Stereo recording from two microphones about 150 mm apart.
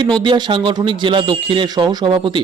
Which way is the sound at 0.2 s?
30° right (ahead or behind).